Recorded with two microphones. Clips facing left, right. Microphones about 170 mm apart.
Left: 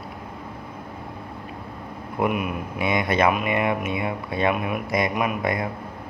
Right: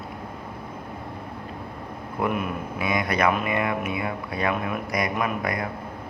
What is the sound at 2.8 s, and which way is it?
Speech, 25° left (ahead or behind).